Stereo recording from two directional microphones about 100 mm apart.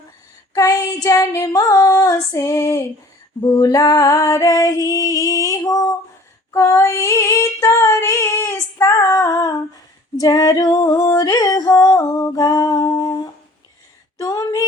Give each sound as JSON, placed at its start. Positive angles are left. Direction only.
{"t": 0.5, "sound": "child singing", "side_deg": 35}
{"t": 0.9, "sound": "music", "side_deg": 40}
{"t": 3.4, "sound": "female singing", "side_deg": 25}
{"t": 3.7, "sound": "music", "side_deg": 40}
{"t": 6.5, "sound": "female singing", "side_deg": 25}
{"t": 10.2, "sound": "music", "side_deg": 35}
{"t": 14.2, "sound": "speech", "side_deg": 35}